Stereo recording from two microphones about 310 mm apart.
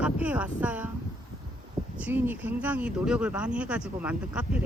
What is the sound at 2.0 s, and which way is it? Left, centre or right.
Speech, centre.